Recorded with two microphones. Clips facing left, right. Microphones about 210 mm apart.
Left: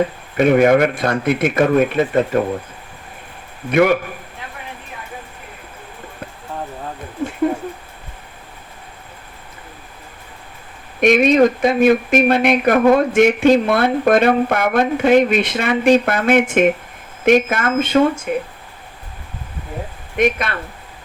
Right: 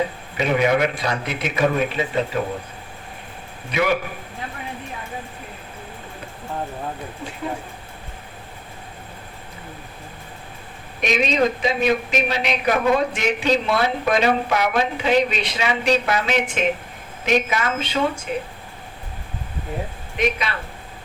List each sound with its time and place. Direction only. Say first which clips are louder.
0.3 s speech: left 7 dB; 55° left (ahead or behind)
3.7 s a man's voice: left 7 dB; 55° left (ahead or behind)
11.0 s speech: left 8 dB; 55° left (ahead or behind)
20.1 s speech: left 5 dB; 55° left (ahead or behind)